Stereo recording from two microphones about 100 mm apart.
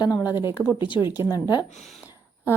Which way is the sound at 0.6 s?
10° left (ahead or behind).